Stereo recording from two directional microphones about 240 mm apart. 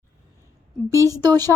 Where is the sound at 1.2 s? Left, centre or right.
Centre.